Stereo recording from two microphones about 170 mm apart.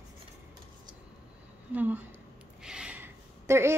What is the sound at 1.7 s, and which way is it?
A woman's voice, 10° right (ahead or behind).